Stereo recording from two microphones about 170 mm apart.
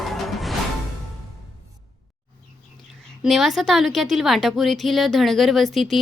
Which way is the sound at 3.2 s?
Centre (ahead or behind).